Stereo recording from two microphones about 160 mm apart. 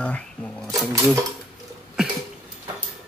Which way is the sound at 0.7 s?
20° right (ahead or behind).